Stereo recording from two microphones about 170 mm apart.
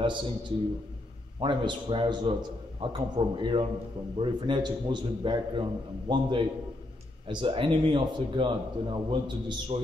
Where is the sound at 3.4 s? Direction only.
30° right (ahead or behind).